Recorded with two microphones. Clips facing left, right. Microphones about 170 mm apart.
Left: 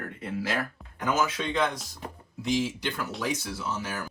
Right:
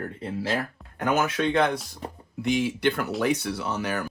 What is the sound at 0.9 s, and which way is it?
Speech, 60° right (ahead or behind).